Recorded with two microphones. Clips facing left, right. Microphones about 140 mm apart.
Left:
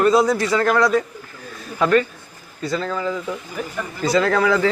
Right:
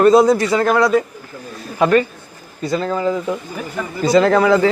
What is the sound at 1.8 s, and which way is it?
A man's voice, 20° right (ahead or behind).